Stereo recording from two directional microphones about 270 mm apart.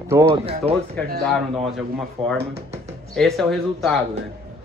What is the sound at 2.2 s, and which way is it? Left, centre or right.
Speech, centre.